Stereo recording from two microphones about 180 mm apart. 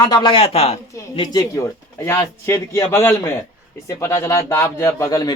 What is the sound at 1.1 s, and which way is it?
A man's voice, 25° left (ahead or behind).